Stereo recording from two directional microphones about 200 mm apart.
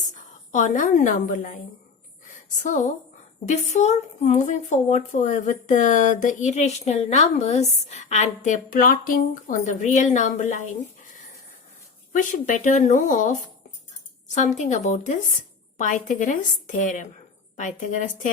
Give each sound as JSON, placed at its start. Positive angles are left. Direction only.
{"t": 0.1, "sound": "a woman's voice", "side_deg": 40}
{"t": 2.6, "sound": "a woman's voice", "side_deg": 35}